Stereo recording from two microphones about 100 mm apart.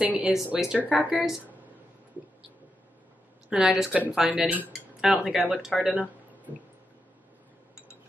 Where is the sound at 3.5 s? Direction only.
5° right (ahead or behind).